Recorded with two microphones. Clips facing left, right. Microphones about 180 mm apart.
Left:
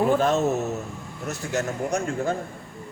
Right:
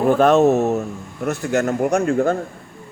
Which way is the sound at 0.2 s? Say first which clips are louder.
Right 8 dB; 60° right (ahead or behind).